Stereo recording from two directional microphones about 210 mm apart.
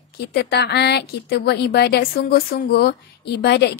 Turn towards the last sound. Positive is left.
turn(degrees=50)  # may be behind; listen again after turning